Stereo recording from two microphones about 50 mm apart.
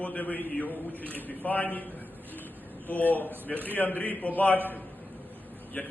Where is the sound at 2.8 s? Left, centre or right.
Left.